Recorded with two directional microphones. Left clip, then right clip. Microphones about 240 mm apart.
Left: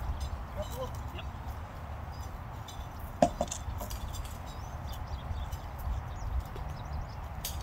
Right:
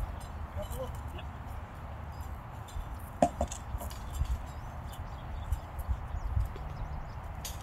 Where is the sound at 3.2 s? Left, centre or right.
Centre.